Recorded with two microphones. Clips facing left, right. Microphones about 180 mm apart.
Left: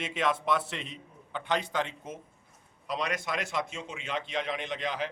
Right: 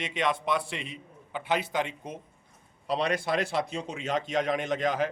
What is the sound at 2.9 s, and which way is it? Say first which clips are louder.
A man's voice: right 5 dB; 30° right (ahead or behind).